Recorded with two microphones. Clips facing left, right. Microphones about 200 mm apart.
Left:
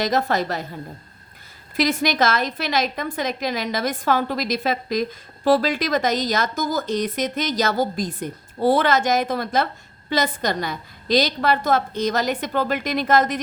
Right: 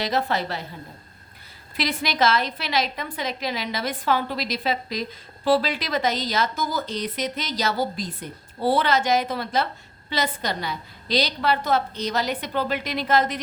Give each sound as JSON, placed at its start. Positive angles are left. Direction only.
{"t": 0.0, "sound": "speech", "side_deg": 45}
{"t": 1.7, "sound": "speech", "side_deg": 45}